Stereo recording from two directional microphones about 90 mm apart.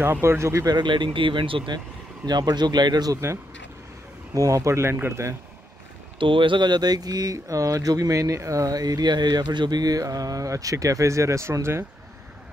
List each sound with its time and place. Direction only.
0.0 s speech: 25° right (ahead or behind)
0.7 s speech: 55° right (ahead or behind)
2.2 s speech: 50° right (ahead or behind)
4.3 s speech: 40° right (ahead or behind)
6.1 s speech: 70° right (ahead or behind); by 11.8 s 30° right (ahead or behind)